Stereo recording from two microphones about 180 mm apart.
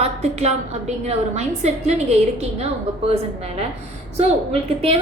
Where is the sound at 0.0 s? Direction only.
35° right (ahead or behind).